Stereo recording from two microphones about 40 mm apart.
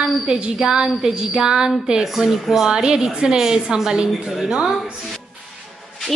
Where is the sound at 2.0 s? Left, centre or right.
Centre.